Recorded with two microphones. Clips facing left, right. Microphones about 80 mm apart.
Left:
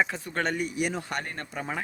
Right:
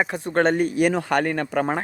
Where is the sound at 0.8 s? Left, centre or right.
Right.